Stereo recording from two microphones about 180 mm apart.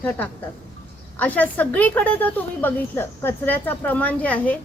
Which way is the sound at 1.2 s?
10° left (ahead or behind).